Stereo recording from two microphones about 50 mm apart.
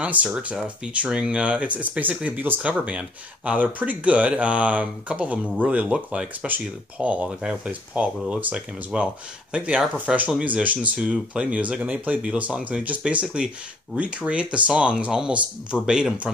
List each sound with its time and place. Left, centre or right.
0.0 s speech: right
7.2 s speech: centre
7.9 s speech: right
10.4 s speech: right; by 16.2 s centre